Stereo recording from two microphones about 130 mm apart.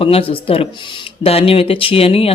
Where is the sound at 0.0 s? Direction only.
45° left (ahead or behind).